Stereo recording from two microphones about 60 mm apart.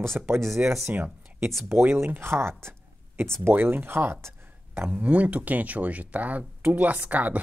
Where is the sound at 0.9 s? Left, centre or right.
Right.